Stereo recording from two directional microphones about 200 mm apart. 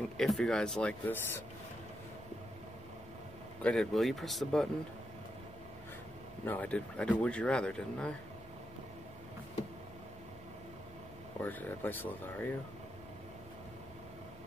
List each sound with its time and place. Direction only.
0.2 s speech: centre (ahead or behind)
3.6 s speech: 5° left (ahead or behind)
6.4 s speech: 10° left (ahead or behind)
11.4 s speech: 10° left (ahead or behind)